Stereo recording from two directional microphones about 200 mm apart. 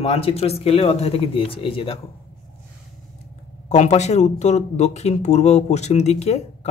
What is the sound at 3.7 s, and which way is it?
Speech, 35° left (ahead or behind).